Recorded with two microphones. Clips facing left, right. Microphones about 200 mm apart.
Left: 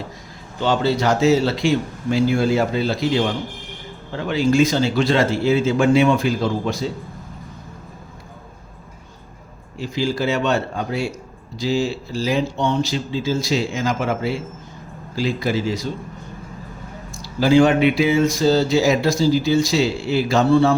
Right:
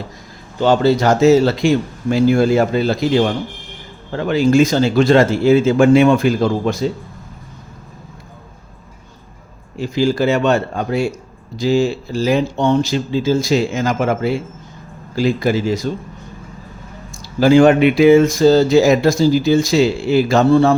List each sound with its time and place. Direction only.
0.6 s speech: 45° right (ahead or behind)
4.3 s speech: 45° right (ahead or behind)
9.7 s speech: 50° right (ahead or behind)
17.4 s speech: 50° right (ahead or behind)